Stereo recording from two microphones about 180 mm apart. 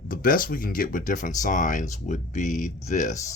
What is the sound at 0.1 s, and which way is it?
Speech, 50° left (ahead or behind).